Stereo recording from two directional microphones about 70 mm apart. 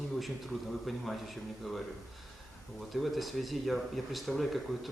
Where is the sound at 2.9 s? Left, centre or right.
Centre.